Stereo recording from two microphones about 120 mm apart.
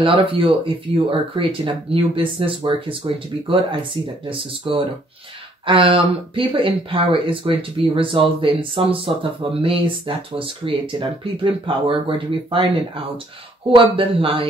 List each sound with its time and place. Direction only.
0.0 s speech: 45° right (ahead or behind)